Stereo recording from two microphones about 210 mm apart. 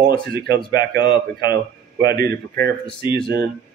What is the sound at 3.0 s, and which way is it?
Speech, 20° left (ahead or behind).